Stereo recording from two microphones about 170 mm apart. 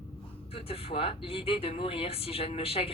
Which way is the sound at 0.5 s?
35° left (ahead or behind).